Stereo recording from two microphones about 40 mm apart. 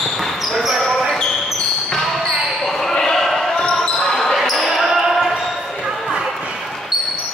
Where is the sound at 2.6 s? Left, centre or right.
Centre.